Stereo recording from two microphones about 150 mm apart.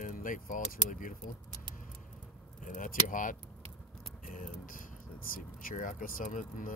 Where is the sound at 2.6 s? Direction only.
60° left (ahead or behind).